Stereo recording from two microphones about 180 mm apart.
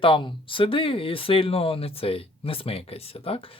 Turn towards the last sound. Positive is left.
turn(degrees=30)  # may be behind; listen again after turning